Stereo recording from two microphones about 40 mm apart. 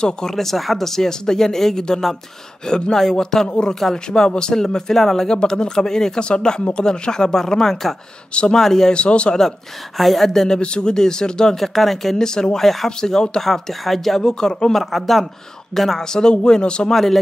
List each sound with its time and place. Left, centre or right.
0.0 s speech: centre
8.9 s speech: left
9.9 s speech: centre
10.6 s speech: left
11.5 s speech: centre
12.2 s speech: centre
13.4 s speech: centre
14.2 s speech: centre
14.8 s speech: centre; by 16.9 s left
16.9 s speech: centre